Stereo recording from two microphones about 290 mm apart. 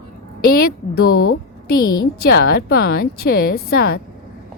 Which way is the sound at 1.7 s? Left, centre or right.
Left.